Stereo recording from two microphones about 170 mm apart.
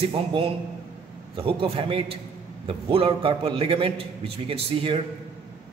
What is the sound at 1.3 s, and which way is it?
A man's voice, 30° right (ahead or behind).